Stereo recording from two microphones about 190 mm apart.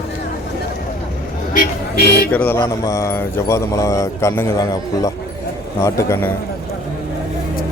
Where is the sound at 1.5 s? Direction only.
50° left (ahead or behind).